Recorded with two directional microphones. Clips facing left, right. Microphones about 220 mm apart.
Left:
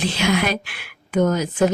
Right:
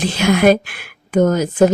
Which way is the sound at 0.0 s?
50° right (ahead or behind).